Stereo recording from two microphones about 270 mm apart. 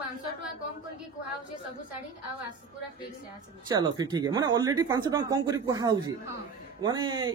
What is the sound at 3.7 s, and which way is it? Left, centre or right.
Speech, centre.